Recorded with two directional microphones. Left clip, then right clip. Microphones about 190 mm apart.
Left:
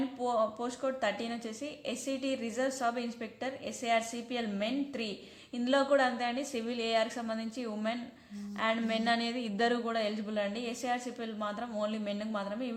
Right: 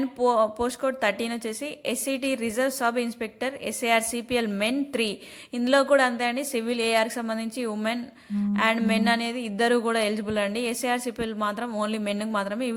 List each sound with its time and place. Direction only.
0.2 s a woman's voice: 40° right (ahead or behind)